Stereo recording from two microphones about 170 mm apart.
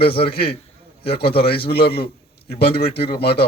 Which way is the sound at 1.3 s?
35° left (ahead or behind).